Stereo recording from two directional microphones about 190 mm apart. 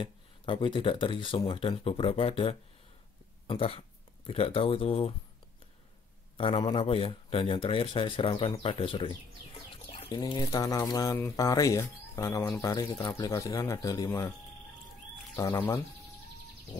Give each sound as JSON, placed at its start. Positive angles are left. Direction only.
{"t": 0.0, "sound": "speech", "side_deg": 25}
{"t": 6.3, "sound": "speech", "side_deg": 30}
{"t": 15.3, "sound": "speech", "side_deg": 15}